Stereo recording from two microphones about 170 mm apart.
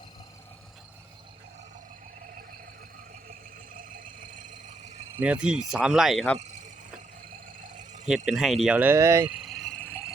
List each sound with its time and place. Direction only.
3.8 s vehicle: 50° right (ahead or behind)
5.2 s speech: 5° right (ahead or behind)
7.6 s a sound: 45° right (ahead or behind)
8.1 s speech: 5° right (ahead or behind)
9.4 s vehicle: centre (ahead or behind)